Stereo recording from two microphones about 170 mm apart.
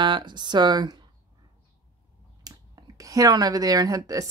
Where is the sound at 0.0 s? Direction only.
25° right (ahead or behind).